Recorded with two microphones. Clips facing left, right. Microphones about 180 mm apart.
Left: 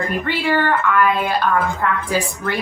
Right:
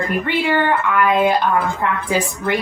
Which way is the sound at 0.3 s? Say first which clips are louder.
Right 1 dB; 15° right (ahead or behind).